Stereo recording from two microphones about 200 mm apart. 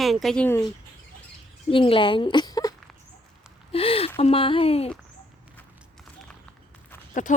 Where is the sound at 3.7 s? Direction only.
30° left (ahead or behind).